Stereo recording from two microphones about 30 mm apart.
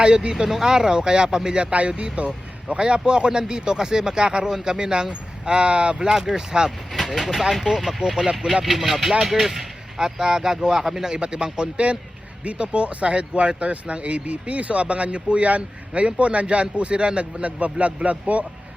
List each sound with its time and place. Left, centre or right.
0.0 s speech: right
2.1 s speech: right
5.5 s speech: right
6.0 s speech: right
8.6 s speech: centre
10.0 s speech: right
11.1 s a man's voice: right